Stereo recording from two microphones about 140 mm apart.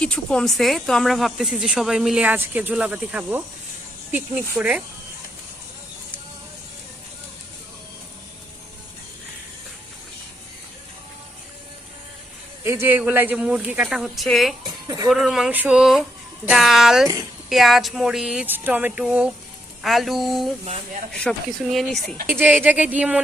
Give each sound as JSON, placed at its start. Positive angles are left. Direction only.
{"t": 0.0, "sound": "speech", "side_deg": 5}
{"t": 12.6, "sound": "speech", "side_deg": -15}
{"t": 14.6, "sound": "speech", "side_deg": -25}
{"t": 15.1, "sound": "speech", "side_deg": 0}
{"t": 20.7, "sound": "speech", "side_deg": -45}
{"t": 21.1, "sound": "speech", "side_deg": 5}
{"t": 22.3, "sound": "speech", "side_deg": -15}